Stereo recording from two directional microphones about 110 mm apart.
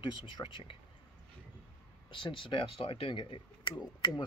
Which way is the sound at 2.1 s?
50° left (ahead or behind).